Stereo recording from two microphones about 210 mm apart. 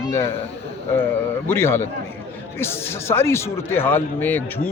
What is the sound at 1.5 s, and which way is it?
Speech, 10° left (ahead or behind).